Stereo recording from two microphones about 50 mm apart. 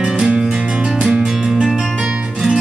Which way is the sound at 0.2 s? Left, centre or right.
Centre.